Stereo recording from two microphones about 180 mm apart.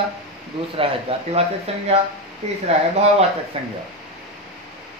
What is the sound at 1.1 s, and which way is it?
Speech, 30° right (ahead or behind).